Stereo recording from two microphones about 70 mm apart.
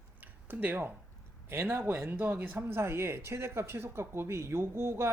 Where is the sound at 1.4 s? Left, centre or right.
Right.